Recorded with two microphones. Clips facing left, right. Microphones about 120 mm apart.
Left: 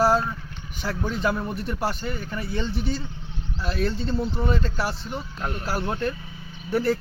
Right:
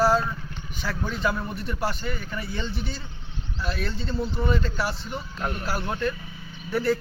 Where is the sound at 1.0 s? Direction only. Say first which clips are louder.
Left 2 dB; 35° left (ahead or behind).